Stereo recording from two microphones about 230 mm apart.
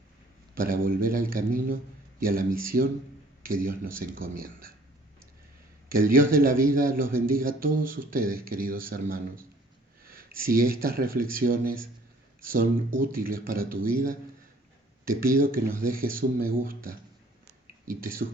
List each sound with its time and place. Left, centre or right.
0.5 s a man's voice: right
5.9 s a man's voice: right